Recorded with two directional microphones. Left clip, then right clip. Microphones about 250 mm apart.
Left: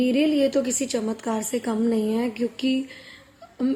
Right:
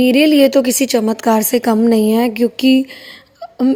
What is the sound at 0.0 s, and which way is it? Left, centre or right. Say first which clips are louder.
Speech: right 11 dB; right.